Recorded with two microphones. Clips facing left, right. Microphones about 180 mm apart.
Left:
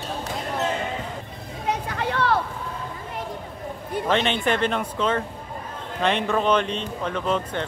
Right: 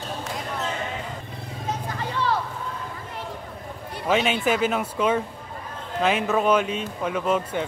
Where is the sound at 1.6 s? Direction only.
70° left (ahead or behind).